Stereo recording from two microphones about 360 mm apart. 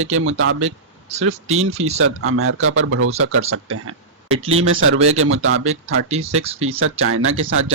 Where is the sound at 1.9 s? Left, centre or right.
Right.